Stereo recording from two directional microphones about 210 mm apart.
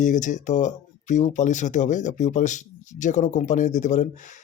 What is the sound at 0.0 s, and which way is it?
Speech, 35° left (ahead or behind).